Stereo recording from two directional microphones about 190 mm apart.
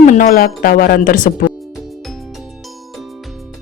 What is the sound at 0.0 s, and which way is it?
Speech, 40° left (ahead or behind).